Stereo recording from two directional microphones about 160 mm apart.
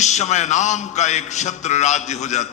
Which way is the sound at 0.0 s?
45° left (ahead or behind).